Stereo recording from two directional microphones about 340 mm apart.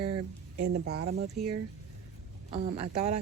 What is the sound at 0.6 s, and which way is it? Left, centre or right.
Speech, right.